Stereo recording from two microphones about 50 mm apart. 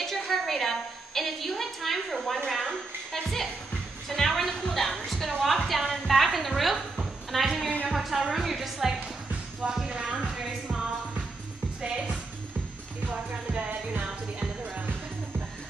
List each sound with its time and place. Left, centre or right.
0.0 s a sound: centre
5.7 s music: centre
7.2 s a sound: centre
7.9 s music: centre
11.8 s music: centre
13.0 s music: right